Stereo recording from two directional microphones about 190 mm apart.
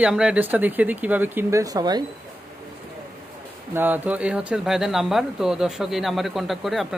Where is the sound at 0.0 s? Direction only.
5° right (ahead or behind); by 2.0 s 20° right (ahead or behind).